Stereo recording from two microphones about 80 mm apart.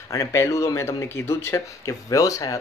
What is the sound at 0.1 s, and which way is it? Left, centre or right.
Speech, left.